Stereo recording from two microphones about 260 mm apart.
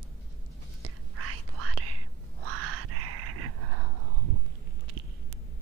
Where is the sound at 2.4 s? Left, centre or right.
Right.